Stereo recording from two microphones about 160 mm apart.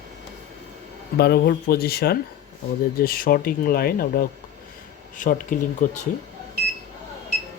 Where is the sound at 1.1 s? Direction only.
90° left; by 4.2 s 70° left (ahead or behind).